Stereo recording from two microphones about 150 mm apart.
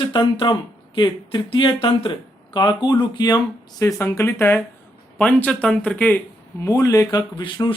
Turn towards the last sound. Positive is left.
turn(degrees=30)  # may be behind; listen again after turning